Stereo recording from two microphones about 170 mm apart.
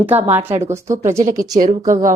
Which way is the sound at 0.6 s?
45° right (ahead or behind).